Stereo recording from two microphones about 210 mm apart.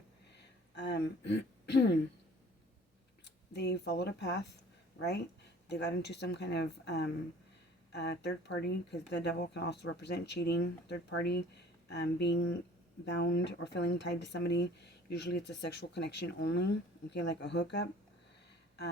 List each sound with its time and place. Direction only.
0.8 s speech: 55° left (ahead or behind)
3.2 s speech: 55° left (ahead or behind)
5.6 s speech: 55° left (ahead or behind)